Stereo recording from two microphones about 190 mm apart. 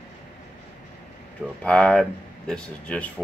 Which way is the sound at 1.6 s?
5° left (ahead or behind).